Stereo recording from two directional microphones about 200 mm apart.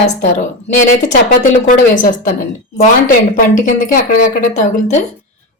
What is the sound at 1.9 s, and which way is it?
Speech, 40° left (ahead or behind).